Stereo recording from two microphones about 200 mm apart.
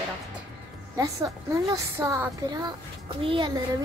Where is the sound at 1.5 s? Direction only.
15° right (ahead or behind).